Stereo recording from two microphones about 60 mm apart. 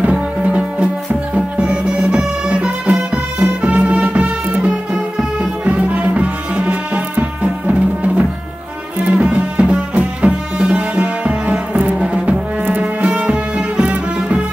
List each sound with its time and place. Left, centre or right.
0.0 s music: right